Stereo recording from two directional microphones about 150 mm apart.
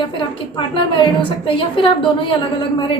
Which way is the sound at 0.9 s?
35° left (ahead or behind).